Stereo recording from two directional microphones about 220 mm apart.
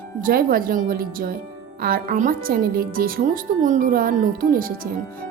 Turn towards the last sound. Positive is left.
turn(degrees=-40)  # may be behind; listen again after turning